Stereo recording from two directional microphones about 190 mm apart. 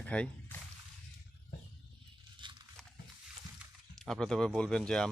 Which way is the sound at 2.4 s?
25° right (ahead or behind).